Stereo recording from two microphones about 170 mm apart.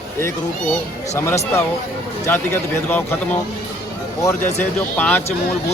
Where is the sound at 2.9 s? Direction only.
10° left (ahead or behind).